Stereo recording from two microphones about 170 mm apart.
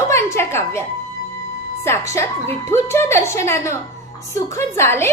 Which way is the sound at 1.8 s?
15° left (ahead or behind).